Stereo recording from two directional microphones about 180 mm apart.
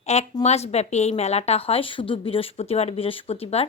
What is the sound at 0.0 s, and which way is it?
A woman's voice, 35° left (ahead or behind).